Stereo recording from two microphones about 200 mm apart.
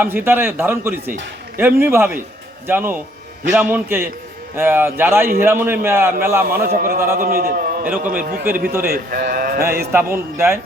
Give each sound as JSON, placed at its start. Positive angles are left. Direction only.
{"t": 0.0, "sound": "speech", "side_deg": -10}
{"t": 6.7, "sound": "a man's voice", "side_deg": -45}
{"t": 9.9, "sound": "speech", "side_deg": -10}